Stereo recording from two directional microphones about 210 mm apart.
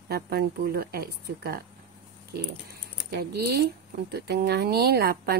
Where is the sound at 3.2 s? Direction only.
50° right (ahead or behind).